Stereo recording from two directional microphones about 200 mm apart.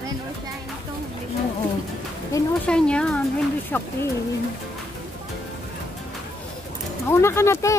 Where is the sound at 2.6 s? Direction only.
5° left (ahead or behind).